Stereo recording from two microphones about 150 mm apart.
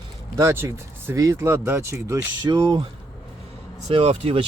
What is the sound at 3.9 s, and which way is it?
Speech, 40° right (ahead or behind).